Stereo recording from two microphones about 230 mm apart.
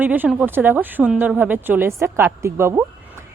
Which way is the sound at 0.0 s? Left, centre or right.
Centre.